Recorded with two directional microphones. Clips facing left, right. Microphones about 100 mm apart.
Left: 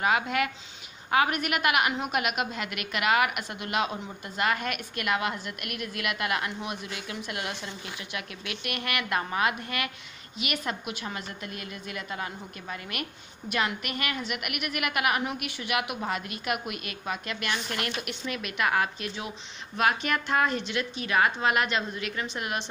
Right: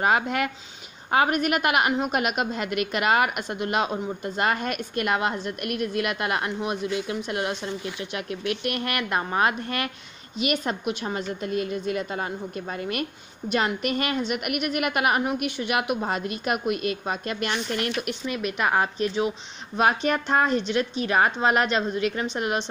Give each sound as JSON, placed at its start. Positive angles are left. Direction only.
{"t": 0.0, "sound": "a woman's voice", "side_deg": -35}